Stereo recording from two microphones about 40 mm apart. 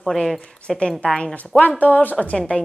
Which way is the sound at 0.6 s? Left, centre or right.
Left.